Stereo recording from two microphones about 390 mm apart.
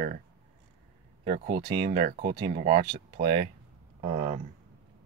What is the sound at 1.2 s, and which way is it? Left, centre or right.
Speech, centre.